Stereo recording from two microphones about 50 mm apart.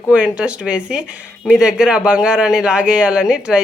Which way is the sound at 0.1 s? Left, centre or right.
Right.